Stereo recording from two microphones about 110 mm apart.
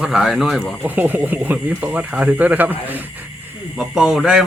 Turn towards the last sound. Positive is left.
turn(degrees=-5)  # may be behind; listen again after turning